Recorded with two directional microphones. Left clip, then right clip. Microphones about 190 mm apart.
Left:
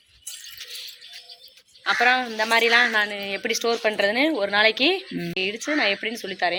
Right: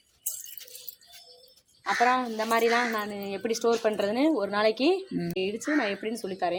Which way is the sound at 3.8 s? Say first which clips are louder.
Left 5 dB; 20° right (ahead or behind).